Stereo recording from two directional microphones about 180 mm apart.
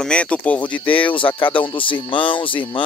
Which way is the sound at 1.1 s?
30° left (ahead or behind).